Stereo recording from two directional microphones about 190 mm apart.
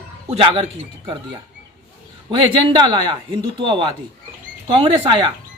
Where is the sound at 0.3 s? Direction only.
30° right (ahead or behind).